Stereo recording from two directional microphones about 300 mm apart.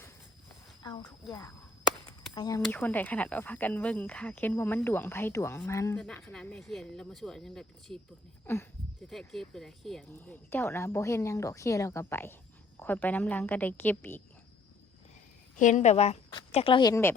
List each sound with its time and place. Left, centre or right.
1.3 s speech: centre
15.5 s a woman's voice: left; by 17.2 s centre